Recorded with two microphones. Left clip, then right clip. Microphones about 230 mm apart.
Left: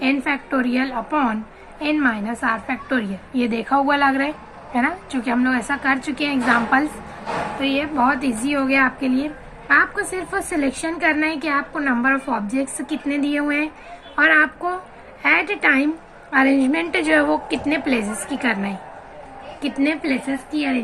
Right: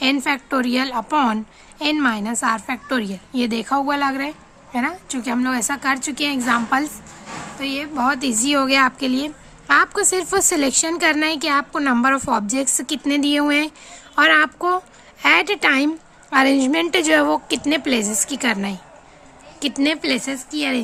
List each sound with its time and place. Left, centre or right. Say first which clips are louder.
0.0 s a woman's voice: right 1 dB; right